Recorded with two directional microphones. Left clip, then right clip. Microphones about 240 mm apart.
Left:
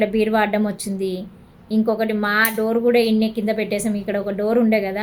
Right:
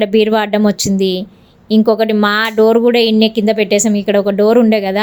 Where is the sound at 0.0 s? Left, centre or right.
Right.